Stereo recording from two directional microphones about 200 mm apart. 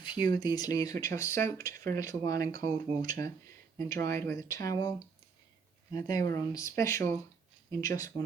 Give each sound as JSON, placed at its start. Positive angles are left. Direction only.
{"t": 0.0, "sound": "speech", "side_deg": 20}
{"t": 3.8, "sound": "speech", "side_deg": 15}